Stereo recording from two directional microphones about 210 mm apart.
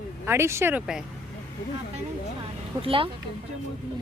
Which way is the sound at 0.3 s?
10° right (ahead or behind).